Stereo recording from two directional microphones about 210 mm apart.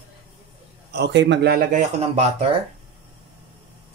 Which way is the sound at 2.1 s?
30° right (ahead or behind).